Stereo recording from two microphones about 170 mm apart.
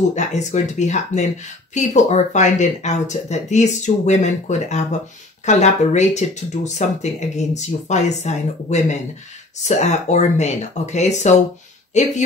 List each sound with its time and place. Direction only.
0.1 s speech: 45° left (ahead or behind)